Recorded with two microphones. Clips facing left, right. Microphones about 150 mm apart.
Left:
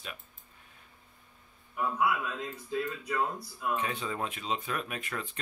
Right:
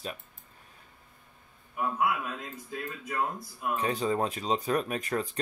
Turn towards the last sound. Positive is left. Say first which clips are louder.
# right 8 dB
turn(degrees=-35)  # may be behind; listen again after turning